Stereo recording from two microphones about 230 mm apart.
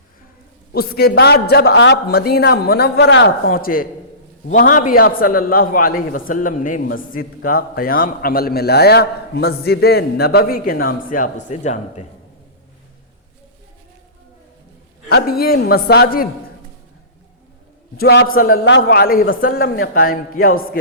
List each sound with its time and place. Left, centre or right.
0.7 s a man's voice: left
3.4 s a man's voice: left
15.1 s a man's voice: left
17.9 s a man's voice: left
18.5 s speech: left
18.8 s a man's voice: left